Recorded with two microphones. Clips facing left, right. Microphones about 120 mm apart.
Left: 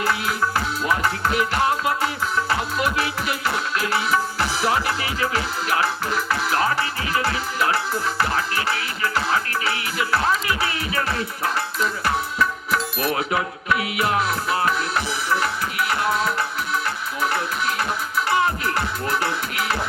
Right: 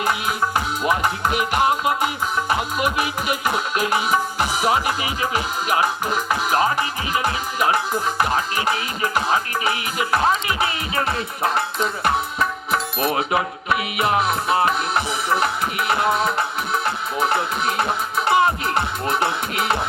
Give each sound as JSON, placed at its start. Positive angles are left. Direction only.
{"t": 0.0, "sound": "music", "side_deg": -20}
{"t": 16.7, "sound": "speech", "side_deg": -20}
{"t": 18.3, "sound": "music", "side_deg": -20}